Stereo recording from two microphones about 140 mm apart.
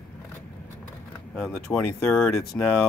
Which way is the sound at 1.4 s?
5° left (ahead or behind).